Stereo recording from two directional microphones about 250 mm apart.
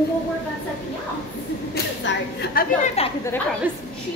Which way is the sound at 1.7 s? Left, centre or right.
Left.